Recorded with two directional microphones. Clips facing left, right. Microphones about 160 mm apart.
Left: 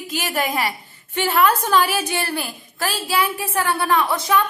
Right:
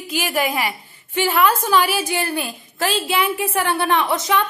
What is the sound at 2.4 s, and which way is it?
A woman's voice, 20° right (ahead or behind).